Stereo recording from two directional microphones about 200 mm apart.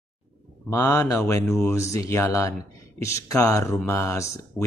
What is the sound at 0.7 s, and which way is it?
Speech, 15° left (ahead or behind).